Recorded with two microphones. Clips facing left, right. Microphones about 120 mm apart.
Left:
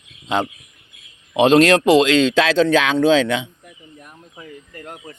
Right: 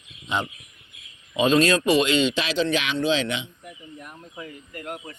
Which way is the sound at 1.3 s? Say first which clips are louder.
Left 7 dB; 80° left.